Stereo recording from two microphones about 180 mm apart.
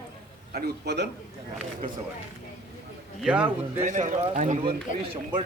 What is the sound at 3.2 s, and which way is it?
Speech, 5° right (ahead or behind).